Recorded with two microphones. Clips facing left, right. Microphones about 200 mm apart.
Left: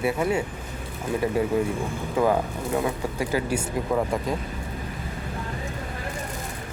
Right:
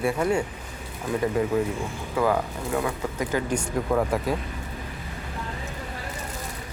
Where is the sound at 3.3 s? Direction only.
5° left (ahead or behind).